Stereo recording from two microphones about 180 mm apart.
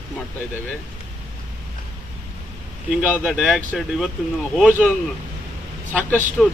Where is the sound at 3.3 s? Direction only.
Centre (ahead or behind).